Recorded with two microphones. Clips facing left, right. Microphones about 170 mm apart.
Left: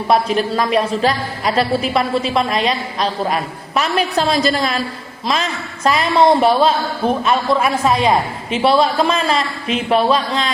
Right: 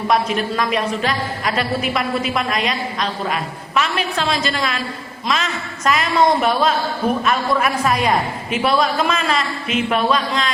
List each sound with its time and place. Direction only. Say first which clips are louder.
0.1 s speech: left 4 dB; 35° left (ahead or behind)